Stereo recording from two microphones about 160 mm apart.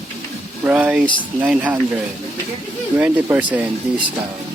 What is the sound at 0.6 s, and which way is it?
Speech, 10° right (ahead or behind).